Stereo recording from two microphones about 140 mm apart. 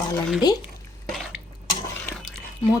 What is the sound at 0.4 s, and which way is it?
Speech, 30° left (ahead or behind).